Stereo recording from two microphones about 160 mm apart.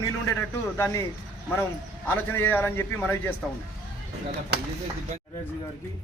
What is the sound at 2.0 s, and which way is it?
A man's voice, 15° left (ahead or behind).